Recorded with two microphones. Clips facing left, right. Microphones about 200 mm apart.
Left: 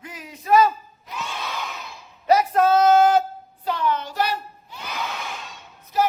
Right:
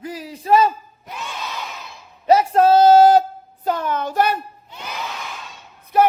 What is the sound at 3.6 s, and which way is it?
Child singing, 45° right (ahead or behind).